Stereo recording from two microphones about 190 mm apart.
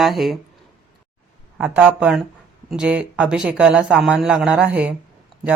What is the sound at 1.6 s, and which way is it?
Speech, 5° right (ahead or behind).